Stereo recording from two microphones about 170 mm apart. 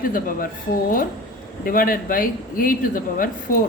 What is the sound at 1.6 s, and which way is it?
A man's voice, 55° left (ahead or behind).